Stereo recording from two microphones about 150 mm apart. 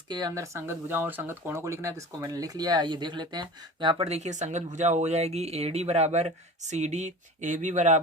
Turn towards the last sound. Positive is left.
turn(degrees=-55)  # may be behind; listen again after turning